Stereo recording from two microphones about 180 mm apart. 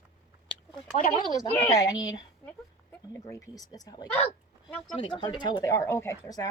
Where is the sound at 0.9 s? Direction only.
50° left (ahead or behind).